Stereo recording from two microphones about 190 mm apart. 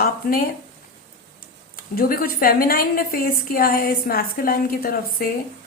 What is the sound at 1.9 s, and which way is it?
A woman's voice, 50° left (ahead or behind).